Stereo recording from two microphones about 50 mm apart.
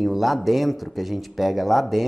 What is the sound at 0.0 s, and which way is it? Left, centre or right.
Speech, centre.